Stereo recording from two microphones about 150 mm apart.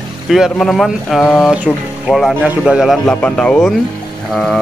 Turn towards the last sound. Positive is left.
turn(degrees=0)  # may be behind; listen again after turning